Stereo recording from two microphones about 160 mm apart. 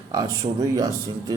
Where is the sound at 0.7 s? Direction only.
20° right (ahead or behind).